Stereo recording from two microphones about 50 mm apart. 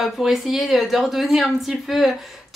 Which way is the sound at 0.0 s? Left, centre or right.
Centre.